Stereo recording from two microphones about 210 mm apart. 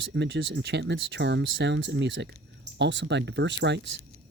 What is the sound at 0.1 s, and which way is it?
Speech, 60° right (ahead or behind).